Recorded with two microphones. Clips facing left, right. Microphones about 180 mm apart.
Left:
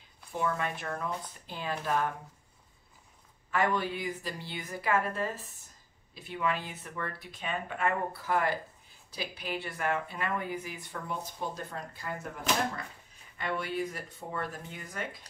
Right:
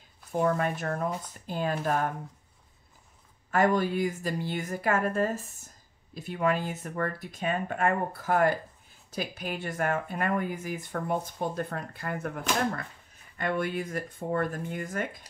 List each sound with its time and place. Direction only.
0.3 s speech: 45° right (ahead or behind)
3.5 s speech: 45° right (ahead or behind)
13.4 s speech: 50° right (ahead or behind)